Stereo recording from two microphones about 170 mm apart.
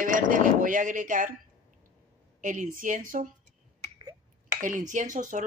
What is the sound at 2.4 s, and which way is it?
Speech, 50° right (ahead or behind).